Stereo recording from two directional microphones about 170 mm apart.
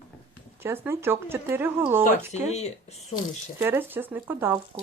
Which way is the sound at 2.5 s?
40° left (ahead or behind).